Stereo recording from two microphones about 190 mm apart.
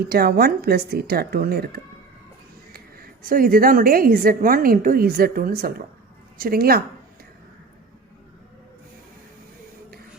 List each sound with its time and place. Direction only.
0.0 s a woman's voice: 55° right (ahead or behind)